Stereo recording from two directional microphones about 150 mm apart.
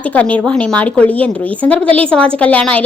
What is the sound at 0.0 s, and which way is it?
A woman's voice, 10° left (ahead or behind).